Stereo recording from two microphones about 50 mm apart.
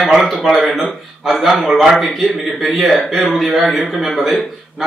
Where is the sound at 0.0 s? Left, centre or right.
Centre.